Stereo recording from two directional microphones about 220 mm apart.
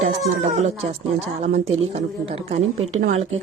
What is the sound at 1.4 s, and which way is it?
A woman's voice, 30° right (ahead or behind).